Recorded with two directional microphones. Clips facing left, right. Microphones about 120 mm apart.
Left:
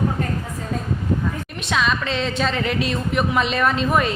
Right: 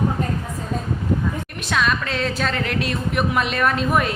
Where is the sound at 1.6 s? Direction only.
Centre (ahead or behind).